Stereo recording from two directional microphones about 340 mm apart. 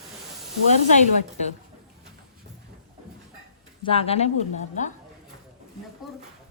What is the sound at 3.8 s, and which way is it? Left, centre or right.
Speech, centre.